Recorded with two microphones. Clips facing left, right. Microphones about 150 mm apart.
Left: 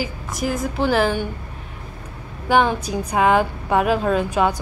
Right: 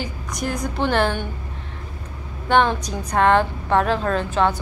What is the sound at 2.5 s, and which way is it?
A woman's voice, 5° left (ahead or behind).